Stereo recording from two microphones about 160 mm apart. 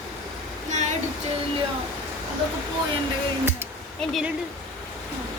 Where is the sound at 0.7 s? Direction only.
50° right (ahead or behind).